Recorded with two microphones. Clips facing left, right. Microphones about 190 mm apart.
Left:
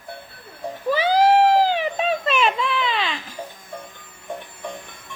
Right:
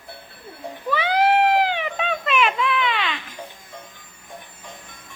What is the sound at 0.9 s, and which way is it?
Baby cry, 35° left (ahead or behind).